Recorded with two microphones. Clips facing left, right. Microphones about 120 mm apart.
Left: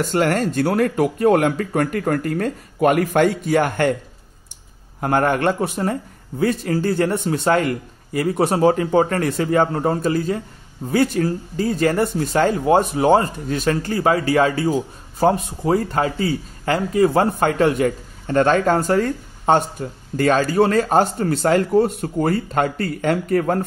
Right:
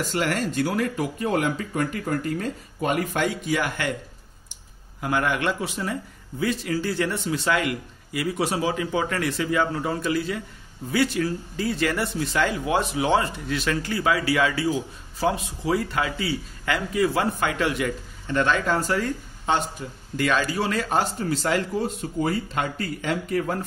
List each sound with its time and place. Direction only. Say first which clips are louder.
0.1 s speech: left 6 dB; 45° left (ahead or behind); by 3.2 s 65° left (ahead or behind)
3.2 s speech: left 8 dB; 50° left (ahead or behind)
5.0 s speech: left 6 dB; 45° left (ahead or behind)